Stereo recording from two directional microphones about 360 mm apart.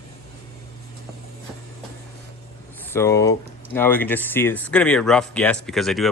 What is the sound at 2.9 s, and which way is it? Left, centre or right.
Speech, centre.